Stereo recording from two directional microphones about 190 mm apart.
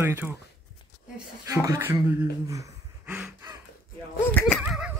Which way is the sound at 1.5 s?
15° right (ahead or behind).